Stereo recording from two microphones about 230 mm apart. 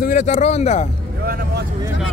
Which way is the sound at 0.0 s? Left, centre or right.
Left.